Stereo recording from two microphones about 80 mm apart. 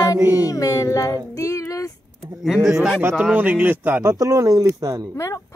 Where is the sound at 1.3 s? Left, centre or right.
Left.